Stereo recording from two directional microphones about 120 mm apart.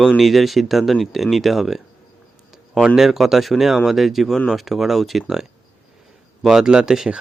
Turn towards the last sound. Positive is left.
turn(degrees=-5)  # may be behind; listen again after turning